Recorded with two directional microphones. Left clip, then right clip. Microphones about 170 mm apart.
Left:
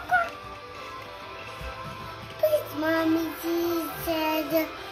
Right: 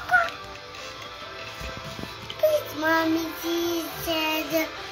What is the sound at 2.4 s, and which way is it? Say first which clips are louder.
Child singing: right 2 dB; 15° left (ahead or behind).